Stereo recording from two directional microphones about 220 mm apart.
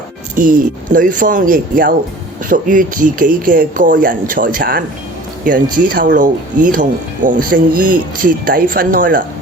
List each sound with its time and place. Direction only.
0.3 s speech: 40° right (ahead or behind)